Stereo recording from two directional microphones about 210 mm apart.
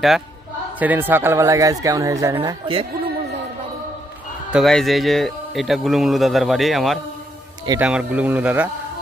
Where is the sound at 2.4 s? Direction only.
25° right (ahead or behind).